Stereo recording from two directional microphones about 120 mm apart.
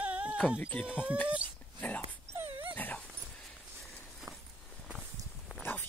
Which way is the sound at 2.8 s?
10° left (ahead or behind).